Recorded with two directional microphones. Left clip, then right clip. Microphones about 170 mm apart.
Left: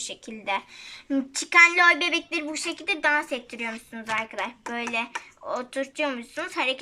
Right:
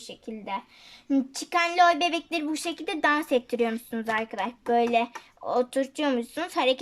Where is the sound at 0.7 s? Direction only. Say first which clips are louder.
Right 1 dB; 35° right (ahead or behind).